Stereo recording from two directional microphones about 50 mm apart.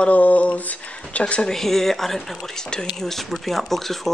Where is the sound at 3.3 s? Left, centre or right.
Centre.